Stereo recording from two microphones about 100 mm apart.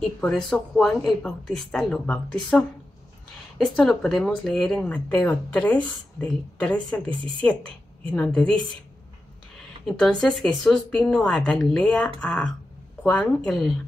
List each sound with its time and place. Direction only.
0.0 s a woman's voice: 5° left (ahead or behind)
7.1 s a woman's voice: 15° left (ahead or behind)
9.8 s a woman's voice: 5° left (ahead or behind)